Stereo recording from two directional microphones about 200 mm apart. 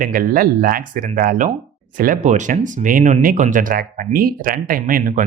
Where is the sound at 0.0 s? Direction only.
45° right (ahead or behind).